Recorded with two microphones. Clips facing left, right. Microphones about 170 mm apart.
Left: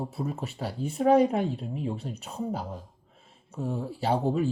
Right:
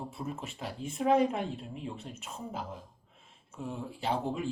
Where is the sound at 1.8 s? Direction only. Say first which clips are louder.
Left 8 dB; 35° left (ahead or behind).